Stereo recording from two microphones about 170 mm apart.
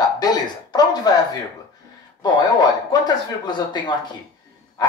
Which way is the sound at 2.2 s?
25° left (ahead or behind).